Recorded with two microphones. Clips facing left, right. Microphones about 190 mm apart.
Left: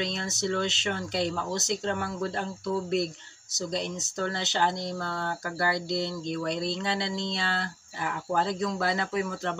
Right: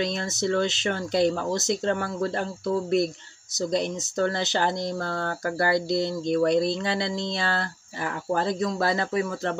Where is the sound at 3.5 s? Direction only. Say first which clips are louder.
Right 6 dB; 35° right (ahead or behind).